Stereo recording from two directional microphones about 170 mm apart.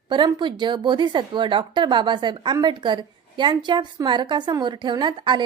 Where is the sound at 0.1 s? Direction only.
25° right (ahead or behind).